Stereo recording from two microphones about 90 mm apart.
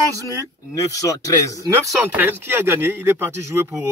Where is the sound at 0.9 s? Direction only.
40° left (ahead or behind).